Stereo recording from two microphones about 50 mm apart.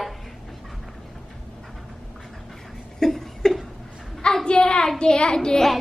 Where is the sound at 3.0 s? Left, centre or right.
Centre.